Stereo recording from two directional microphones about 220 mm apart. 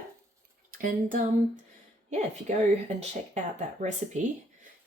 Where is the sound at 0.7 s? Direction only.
40° right (ahead or behind).